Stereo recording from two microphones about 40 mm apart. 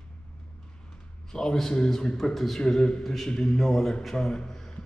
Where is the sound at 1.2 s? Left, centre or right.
Centre.